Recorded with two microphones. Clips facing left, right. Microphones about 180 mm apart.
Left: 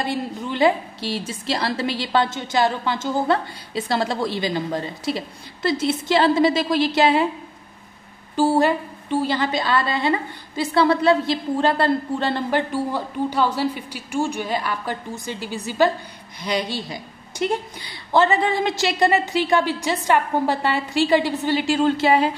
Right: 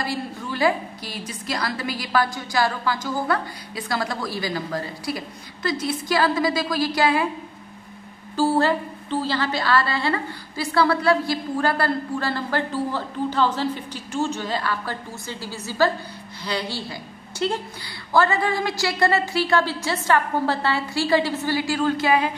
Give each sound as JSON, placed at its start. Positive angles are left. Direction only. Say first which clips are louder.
{"t": 0.0, "sound": "a woman's voice", "louder": "left 3 dB", "side_deg": 20}
{"t": 8.4, "sound": "a woman's voice", "louder": "left 2 dB", "side_deg": 15}